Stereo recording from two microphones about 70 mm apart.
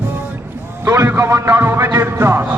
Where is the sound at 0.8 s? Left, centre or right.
Right.